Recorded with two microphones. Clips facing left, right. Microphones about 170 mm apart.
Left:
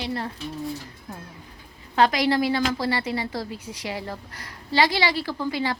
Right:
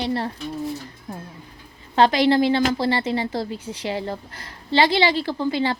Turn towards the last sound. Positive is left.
turn(degrees=-30)  # may be behind; listen again after turning